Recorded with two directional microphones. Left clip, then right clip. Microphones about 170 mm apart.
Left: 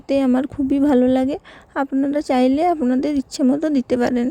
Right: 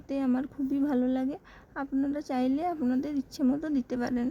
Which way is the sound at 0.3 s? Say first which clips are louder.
Left 11 dB; 45° left (ahead or behind).